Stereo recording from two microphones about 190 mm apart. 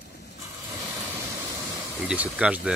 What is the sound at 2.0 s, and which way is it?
Speech, 5° right (ahead or behind).